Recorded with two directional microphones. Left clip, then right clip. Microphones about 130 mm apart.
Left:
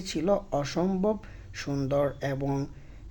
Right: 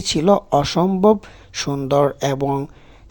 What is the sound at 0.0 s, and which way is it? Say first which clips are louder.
Speech: right 11 dB; 55° right (ahead or behind).